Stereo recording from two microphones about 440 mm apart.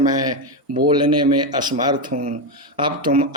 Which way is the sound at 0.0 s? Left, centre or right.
Centre.